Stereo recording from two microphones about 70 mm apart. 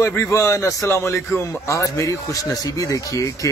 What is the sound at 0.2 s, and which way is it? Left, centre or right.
A man's voice, left.